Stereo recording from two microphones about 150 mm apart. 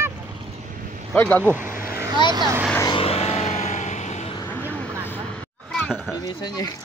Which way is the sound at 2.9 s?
40° left (ahead or behind).